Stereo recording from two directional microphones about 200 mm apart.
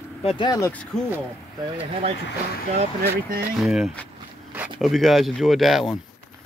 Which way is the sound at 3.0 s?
50° right (ahead or behind).